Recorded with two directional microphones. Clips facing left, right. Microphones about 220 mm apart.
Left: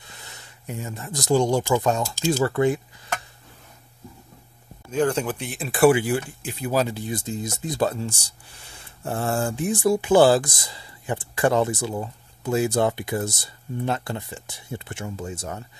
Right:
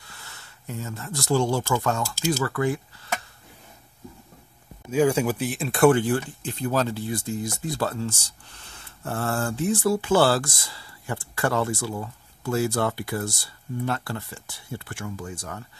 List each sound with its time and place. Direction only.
0.0 s speech: 20° left (ahead or behind)
4.9 s speech: 10° right (ahead or behind); by 15.6 s 25° left (ahead or behind)